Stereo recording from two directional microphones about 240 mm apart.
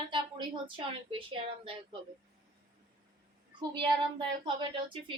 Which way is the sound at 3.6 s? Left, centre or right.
Centre.